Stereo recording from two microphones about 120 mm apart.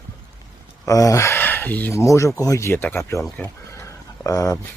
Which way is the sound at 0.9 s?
30° left (ahead or behind).